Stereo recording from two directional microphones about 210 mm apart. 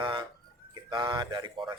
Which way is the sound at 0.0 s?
20° right (ahead or behind).